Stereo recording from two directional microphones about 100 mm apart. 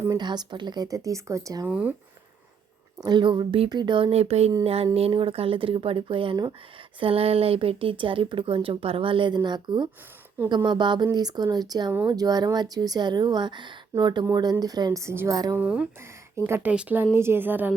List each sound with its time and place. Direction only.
0.2 s speech: 45° right (ahead or behind); by 1.6 s 30° right (ahead or behind)
1.6 s speech: 15° right (ahead or behind)
3.0 s speech: 50° right (ahead or behind); by 4.5 s 90° right
4.6 s speech: 80° right; by 6.3 s 60° right (ahead or behind)
7.0 s speech: 70° right (ahead or behind); by 15.0 s 40° right (ahead or behind)
15.0 s a woman's voice: 25° right (ahead or behind)
15.3 s speech: 40° right (ahead or behind)
15.5 s a woman's voice: 10° right (ahead or behind)